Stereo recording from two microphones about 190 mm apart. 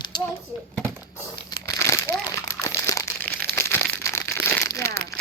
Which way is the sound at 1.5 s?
15° left (ahead or behind).